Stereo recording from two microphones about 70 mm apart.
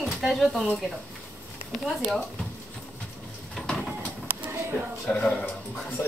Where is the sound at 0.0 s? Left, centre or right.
Centre.